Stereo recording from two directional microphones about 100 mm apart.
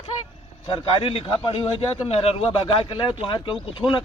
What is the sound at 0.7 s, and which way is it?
Speech, 60° left (ahead or behind).